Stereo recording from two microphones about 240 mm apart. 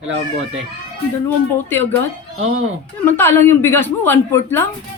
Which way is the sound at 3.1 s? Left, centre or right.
Centre.